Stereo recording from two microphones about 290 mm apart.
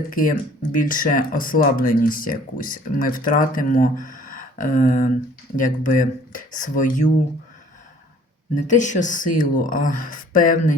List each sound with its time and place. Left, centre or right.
0.1 s speech: left
8.6 s speech: left